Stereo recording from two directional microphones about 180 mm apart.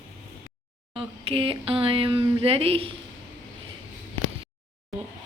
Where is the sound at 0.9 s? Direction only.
30° right (ahead or behind).